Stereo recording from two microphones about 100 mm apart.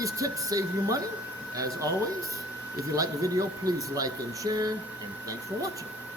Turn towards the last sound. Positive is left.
turn(degrees=-40)  # may be behind; listen again after turning